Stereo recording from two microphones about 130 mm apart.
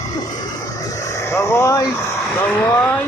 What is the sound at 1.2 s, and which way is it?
Speech, 20° left (ahead or behind).